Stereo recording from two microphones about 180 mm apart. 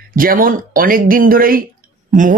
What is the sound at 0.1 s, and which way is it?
A man's voice, 50° right (ahead or behind).